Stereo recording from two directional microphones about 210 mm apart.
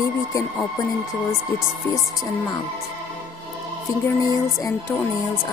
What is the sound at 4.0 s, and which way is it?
Speech, 15° left (ahead or behind).